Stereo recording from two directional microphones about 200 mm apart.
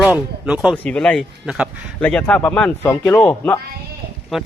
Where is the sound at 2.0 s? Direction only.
5° left (ahead or behind).